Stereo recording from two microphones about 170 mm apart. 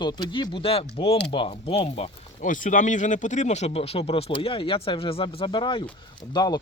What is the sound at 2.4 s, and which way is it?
Speech, 50° left (ahead or behind).